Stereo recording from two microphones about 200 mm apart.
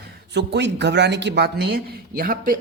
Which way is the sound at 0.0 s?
60° right (ahead or behind).